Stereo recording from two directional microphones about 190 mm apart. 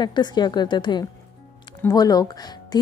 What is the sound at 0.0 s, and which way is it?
A woman's voice, 25° left (ahead or behind).